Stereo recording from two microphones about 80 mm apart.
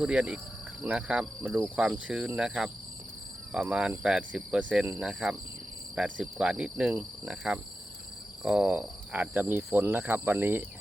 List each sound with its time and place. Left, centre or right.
0.0 s speech: centre
6.4 s speech: centre